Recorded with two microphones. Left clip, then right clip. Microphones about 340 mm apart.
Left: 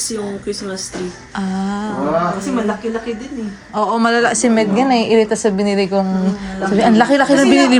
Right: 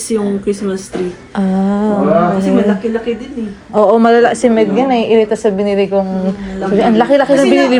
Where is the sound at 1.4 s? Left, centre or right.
Centre.